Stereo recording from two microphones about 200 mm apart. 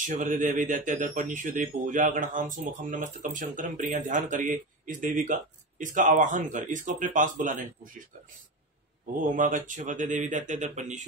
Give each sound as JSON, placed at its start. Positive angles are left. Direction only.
{"t": 0.0, "sound": "speech", "side_deg": -40}
{"t": 9.2, "sound": "speech", "side_deg": -40}